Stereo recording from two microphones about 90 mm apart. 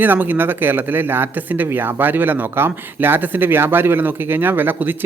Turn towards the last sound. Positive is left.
turn(degrees=-20)  # may be behind; listen again after turning